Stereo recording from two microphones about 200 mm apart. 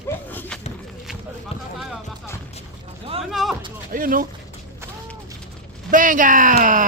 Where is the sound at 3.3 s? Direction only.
Centre (ahead or behind).